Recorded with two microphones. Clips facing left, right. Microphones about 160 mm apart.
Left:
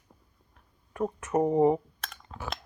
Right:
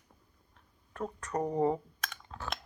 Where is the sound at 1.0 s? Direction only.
20° left (ahead or behind).